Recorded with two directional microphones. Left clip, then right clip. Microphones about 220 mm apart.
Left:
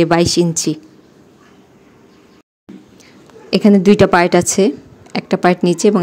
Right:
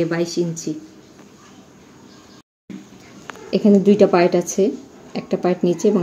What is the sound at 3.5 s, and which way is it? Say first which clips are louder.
Speech: left 4 dB; 45° left (ahead or behind).